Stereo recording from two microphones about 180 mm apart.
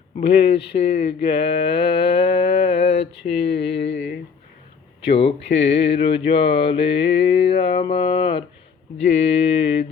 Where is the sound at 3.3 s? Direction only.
70° left (ahead or behind).